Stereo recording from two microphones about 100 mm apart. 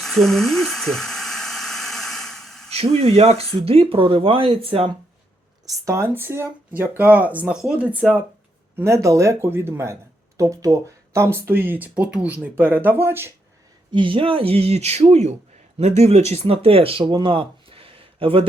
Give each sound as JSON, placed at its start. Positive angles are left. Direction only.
{"t": 0.0, "sound": "a sound", "side_deg": 0}
{"t": 2.7, "sound": "speech", "side_deg": -90}
{"t": 5.8, "sound": "speech", "side_deg": -25}
{"t": 8.7, "sound": "speech", "side_deg": -30}
{"t": 13.9, "sound": "speech", "side_deg": -60}
{"t": 16.3, "sound": "speech", "side_deg": -80}
{"t": 17.0, "sound": "a sound", "side_deg": -50}